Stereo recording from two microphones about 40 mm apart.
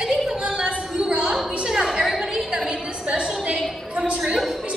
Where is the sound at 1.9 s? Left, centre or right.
Centre.